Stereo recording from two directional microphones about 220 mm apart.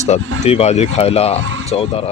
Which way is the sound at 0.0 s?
30° left (ahead or behind).